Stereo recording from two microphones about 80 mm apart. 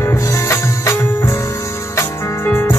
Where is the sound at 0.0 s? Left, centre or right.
Left.